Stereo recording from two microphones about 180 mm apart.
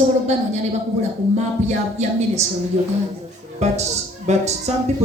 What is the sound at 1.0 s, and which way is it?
Speech, 40° right (ahead or behind).